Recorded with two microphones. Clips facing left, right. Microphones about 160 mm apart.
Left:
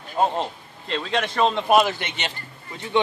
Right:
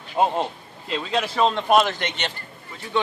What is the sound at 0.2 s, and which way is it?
Speech, 15° right (ahead or behind).